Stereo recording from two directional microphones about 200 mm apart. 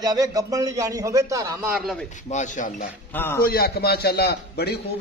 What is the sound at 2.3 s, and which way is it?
Speech, 40° left (ahead or behind).